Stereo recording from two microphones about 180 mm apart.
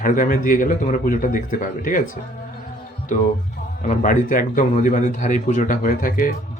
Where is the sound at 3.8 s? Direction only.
45° left (ahead or behind).